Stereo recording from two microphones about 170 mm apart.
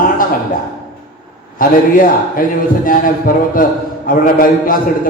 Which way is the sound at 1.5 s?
55° left (ahead or behind).